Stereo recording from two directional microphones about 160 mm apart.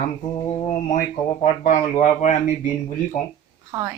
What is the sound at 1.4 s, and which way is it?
Speech, 45° left (ahead or behind).